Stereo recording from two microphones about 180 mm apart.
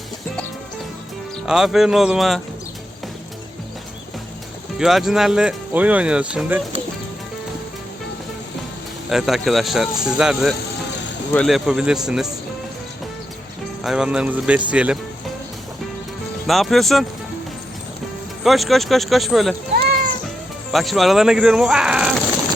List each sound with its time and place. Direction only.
1.5 s speech: 5° right (ahead or behind)
4.8 s speech: centre (ahead or behind)
9.0 s speech: centre (ahead or behind)
13.8 s speech: 5° right (ahead or behind)
16.5 s speech: centre (ahead or behind)
18.4 s speech: centre (ahead or behind)
20.7 s speech: centre (ahead or behind)